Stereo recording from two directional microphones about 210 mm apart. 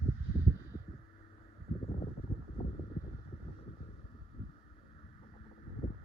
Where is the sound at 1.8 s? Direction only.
30° left (ahead or behind).